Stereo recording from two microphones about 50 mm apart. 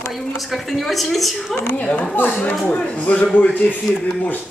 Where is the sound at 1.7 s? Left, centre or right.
Left.